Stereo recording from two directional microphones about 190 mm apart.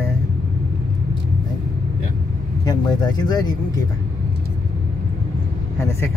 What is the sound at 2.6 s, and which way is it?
Speech, 20° left (ahead or behind).